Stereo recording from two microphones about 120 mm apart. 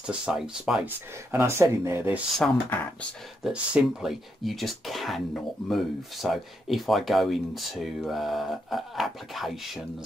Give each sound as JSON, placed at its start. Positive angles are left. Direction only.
{"t": 0.0, "sound": "speech", "side_deg": -5}
{"t": 0.8, "sound": "speech", "side_deg": -20}
{"t": 3.4, "sound": "speech", "side_deg": -5}